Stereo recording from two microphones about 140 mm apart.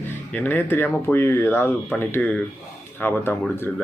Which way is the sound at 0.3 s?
10° left (ahead or behind).